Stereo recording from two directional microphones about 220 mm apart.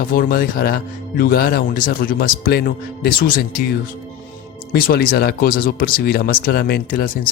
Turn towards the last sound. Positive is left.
turn(degrees=40)  # may be behind; listen again after turning